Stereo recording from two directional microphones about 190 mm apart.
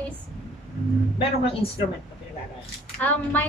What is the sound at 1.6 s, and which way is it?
Speech, 30° left (ahead or behind).